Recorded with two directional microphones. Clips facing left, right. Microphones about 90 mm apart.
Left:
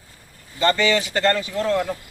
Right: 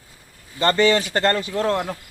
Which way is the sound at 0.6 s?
40° right (ahead or behind).